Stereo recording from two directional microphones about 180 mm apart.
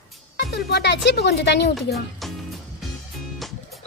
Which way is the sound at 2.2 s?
Centre (ahead or behind).